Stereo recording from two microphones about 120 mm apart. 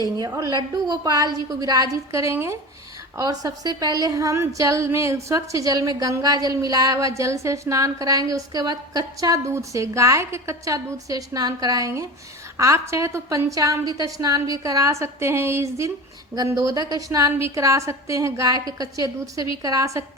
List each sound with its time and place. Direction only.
0.2 s a woman's voice: 30° right (ahead or behind)